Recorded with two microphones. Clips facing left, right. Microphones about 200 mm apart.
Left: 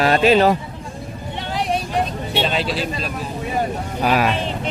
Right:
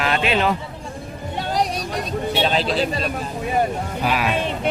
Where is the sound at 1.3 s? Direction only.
40° right (ahead or behind).